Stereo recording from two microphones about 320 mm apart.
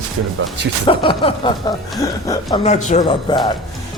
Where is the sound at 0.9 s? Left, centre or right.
Centre.